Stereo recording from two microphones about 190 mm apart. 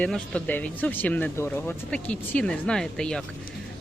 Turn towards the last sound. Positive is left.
turn(degrees=5)  # may be behind; listen again after turning